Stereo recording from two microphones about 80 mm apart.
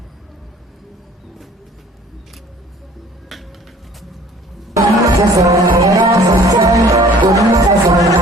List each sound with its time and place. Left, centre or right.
4.7 s music: right